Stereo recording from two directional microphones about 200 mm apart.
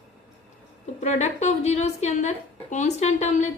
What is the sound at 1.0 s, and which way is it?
A woman's voice, 35° left (ahead or behind).